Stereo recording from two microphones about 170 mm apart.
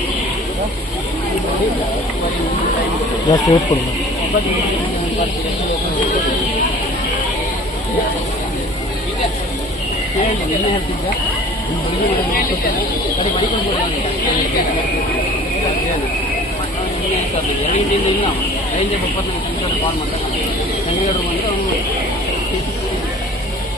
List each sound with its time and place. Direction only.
3.3 s speech: 20° left (ahead or behind)